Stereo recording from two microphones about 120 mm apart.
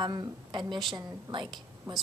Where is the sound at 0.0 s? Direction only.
35° right (ahead or behind).